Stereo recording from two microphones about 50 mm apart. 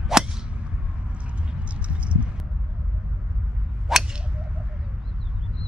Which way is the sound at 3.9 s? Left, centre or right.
Centre.